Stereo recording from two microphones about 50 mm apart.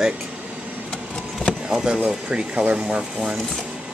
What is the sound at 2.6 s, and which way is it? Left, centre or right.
Speech, right.